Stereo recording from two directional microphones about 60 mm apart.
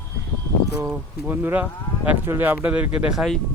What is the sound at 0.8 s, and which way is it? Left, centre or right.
Speech, right.